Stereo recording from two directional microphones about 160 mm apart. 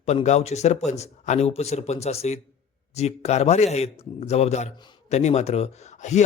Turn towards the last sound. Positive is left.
turn(degrees=45)  # may be behind; listen again after turning